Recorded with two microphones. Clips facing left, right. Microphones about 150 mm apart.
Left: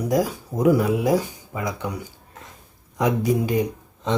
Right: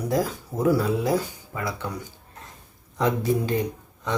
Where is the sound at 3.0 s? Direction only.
15° left (ahead or behind).